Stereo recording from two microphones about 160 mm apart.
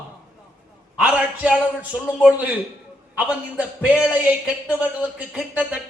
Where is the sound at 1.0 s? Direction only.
5° right (ahead or behind).